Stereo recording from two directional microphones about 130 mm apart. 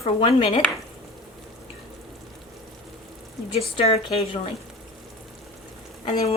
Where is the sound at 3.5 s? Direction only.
50° left (ahead or behind).